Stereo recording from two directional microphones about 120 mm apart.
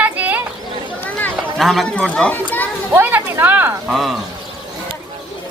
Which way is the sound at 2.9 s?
15° right (ahead or behind).